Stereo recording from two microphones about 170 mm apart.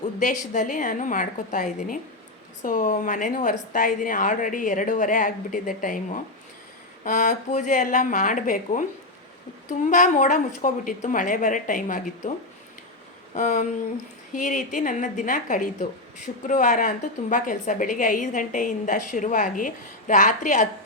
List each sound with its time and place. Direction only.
0.2 s a woman's voice: 50° left (ahead or behind)
13.3 s a woman's voice: 50° left (ahead or behind)